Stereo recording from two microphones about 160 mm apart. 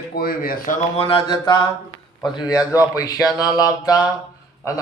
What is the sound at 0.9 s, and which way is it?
A man's voice, 35° left (ahead or behind).